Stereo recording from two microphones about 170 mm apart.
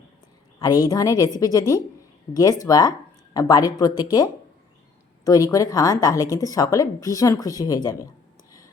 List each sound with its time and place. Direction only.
0.6 s a woman's voice: 20° left (ahead or behind)